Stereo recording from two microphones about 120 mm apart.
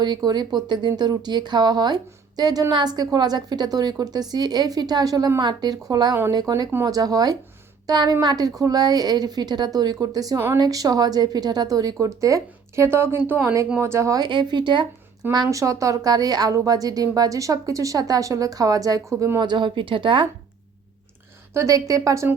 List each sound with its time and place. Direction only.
0.0 s speech: 35° right (ahead or behind)
14.3 s speech: 40° right (ahead or behind)
19.4 s a woman's voice: 40° right (ahead or behind)
21.5 s a woman's voice: 25° right (ahead or behind)